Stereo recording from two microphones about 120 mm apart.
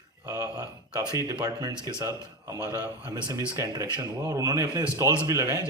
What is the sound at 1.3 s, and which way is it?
Speech, 30° right (ahead or behind).